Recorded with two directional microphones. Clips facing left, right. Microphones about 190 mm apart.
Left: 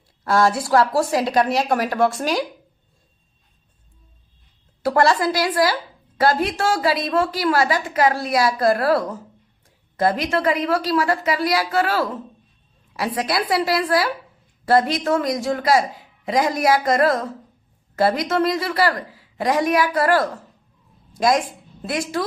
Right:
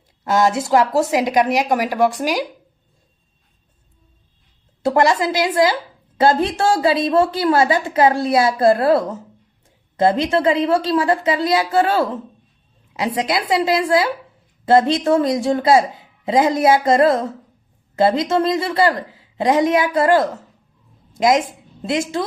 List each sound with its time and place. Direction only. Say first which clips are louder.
0.3 s a woman's voice: right 1 dB; 20° right (ahead or behind)
4.8 s a woman's voice: right 2 dB; 20° right (ahead or behind)